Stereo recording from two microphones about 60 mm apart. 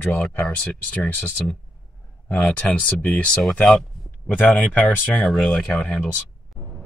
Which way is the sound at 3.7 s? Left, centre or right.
Centre.